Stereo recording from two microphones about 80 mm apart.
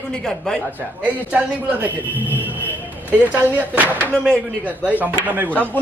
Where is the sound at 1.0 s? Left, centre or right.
Centre.